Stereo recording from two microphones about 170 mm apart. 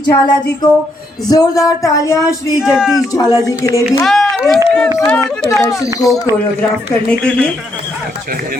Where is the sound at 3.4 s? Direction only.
20° left (ahead or behind).